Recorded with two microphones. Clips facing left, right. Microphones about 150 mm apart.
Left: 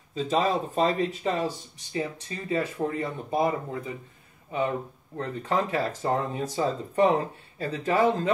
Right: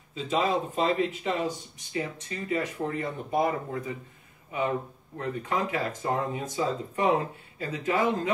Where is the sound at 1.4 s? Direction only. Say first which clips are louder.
Left 1 dB; 30° left (ahead or behind).